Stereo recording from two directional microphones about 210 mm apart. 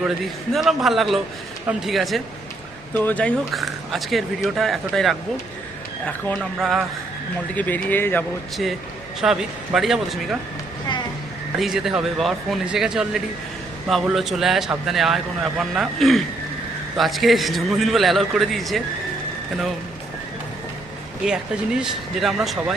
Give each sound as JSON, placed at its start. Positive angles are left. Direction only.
{"t": 0.5, "sound": "a man's voice", "side_deg": 0}
{"t": 11.6, "sound": "a man's voice", "side_deg": 0}
{"t": 21.2, "sound": "a man's voice", "side_deg": -5}